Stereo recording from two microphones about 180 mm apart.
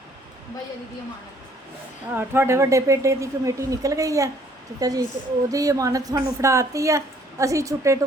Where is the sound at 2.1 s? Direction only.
15° right (ahead or behind).